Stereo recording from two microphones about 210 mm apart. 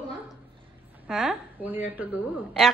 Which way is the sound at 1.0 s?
Centre (ahead or behind).